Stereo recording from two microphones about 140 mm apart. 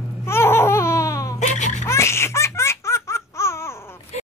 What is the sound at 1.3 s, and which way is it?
Baby laughter, 55° left (ahead or behind).